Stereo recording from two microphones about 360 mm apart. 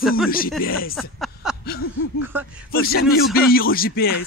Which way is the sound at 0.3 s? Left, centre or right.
Left.